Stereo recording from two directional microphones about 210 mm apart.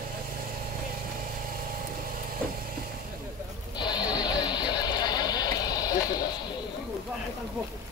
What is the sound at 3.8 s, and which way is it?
Vehicle, 20° left (ahead or behind).